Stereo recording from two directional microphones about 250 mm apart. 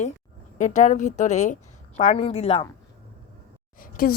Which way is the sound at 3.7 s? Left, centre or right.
Left.